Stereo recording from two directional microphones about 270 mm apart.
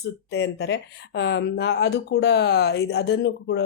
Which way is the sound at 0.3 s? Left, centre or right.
Left.